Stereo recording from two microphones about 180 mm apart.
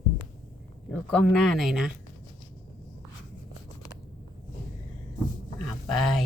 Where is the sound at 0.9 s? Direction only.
5° left (ahead or behind).